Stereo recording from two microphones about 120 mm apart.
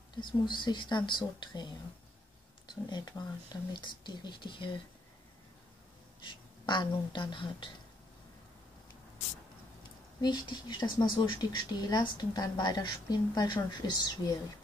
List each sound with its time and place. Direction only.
0.1 s speech: 40° left (ahead or behind)
2.7 s speech: 40° left (ahead or behind)
6.2 s speech: 40° left (ahead or behind)
10.2 s speech: 35° left (ahead or behind)